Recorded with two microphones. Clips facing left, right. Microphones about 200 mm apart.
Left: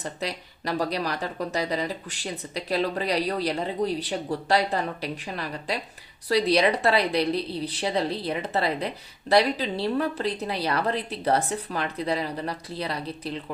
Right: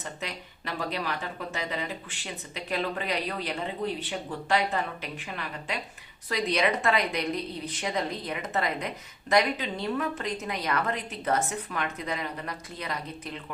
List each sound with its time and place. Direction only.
0.0 s speech: 35° left (ahead or behind)